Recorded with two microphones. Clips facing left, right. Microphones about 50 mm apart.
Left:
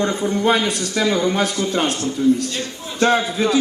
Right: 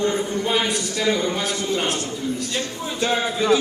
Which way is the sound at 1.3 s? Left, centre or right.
Left.